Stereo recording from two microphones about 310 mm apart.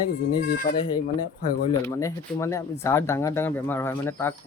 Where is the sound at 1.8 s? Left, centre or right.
Centre.